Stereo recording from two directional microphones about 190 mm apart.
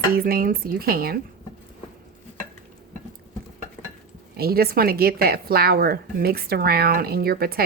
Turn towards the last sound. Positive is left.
turn(degrees=-50)  # may be behind; listen again after turning